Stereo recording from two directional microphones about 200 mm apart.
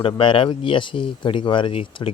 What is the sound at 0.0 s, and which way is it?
Speech, 25° left (ahead or behind).